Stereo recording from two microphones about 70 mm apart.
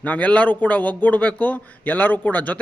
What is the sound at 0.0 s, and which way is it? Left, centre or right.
A man's voice, left.